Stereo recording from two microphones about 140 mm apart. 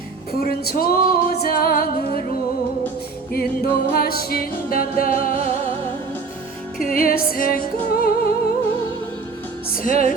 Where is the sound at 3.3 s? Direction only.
90° left.